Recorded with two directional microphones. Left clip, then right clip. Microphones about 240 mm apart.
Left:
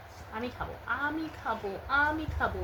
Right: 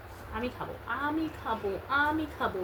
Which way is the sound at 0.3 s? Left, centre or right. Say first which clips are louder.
Right 1 dB; left.